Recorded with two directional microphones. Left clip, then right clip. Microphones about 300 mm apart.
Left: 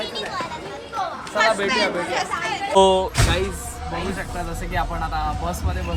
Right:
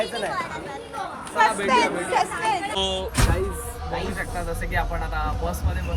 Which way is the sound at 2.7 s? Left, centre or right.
Left.